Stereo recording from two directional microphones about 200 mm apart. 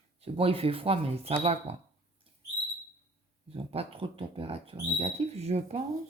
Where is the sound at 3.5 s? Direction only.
30° right (ahead or behind).